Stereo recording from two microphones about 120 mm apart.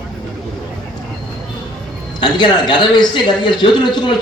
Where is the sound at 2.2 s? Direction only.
40° left (ahead or behind).